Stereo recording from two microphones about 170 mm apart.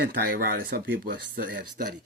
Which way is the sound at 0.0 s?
60° right (ahead or behind).